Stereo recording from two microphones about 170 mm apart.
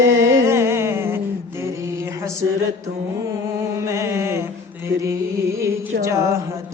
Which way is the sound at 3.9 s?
15° right (ahead or behind).